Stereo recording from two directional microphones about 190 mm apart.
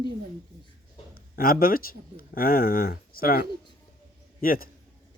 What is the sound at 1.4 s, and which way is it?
A man's voice, 50° left (ahead or behind).